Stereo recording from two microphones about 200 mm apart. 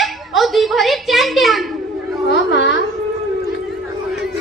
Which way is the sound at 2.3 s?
60° left (ahead or behind).